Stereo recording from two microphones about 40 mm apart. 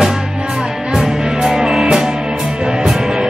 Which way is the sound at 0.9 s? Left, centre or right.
Centre.